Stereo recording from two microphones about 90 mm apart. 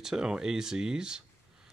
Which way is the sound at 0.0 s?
5° right (ahead or behind).